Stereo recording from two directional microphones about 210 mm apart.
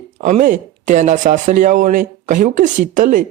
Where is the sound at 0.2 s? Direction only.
35° right (ahead or behind).